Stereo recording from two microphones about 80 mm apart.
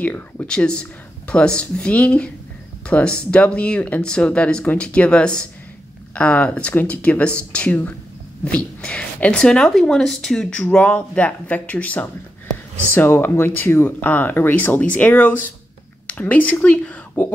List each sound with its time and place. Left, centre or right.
0.0 s speech: centre